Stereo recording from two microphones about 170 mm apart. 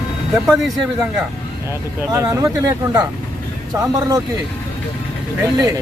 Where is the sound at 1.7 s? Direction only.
15° right (ahead or behind).